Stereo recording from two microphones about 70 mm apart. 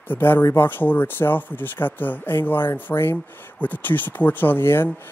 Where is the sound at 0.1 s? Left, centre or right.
Left.